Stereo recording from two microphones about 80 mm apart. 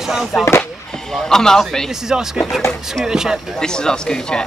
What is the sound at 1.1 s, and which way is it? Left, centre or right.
Speech, centre.